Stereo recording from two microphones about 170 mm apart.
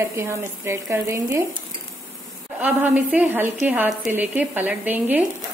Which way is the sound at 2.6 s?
10° right (ahead or behind).